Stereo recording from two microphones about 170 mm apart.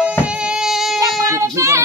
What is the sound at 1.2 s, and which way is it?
Child singing, 15° right (ahead or behind).